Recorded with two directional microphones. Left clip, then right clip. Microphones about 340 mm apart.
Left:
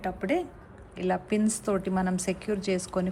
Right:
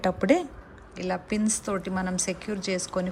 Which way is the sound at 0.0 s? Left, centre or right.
Centre.